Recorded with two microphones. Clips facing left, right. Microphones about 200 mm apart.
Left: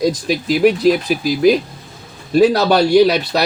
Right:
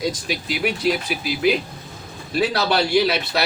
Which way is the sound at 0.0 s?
40° left (ahead or behind).